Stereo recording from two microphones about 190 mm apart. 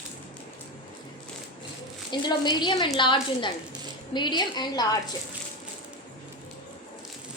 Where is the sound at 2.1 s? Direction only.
25° left (ahead or behind).